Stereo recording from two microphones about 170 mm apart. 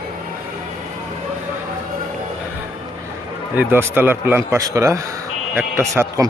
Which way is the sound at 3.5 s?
10° right (ahead or behind).